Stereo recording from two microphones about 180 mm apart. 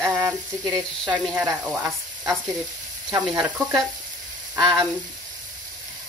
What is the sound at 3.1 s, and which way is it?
Frying, 20° right (ahead or behind).